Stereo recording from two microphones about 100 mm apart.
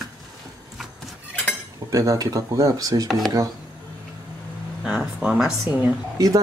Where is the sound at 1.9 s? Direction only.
35° right (ahead or behind).